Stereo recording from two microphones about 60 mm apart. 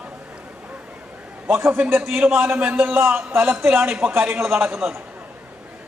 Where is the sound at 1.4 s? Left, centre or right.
Right.